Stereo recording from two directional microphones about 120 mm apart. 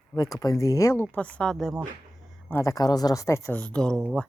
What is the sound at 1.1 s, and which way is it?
Speech, 10° left (ahead or behind).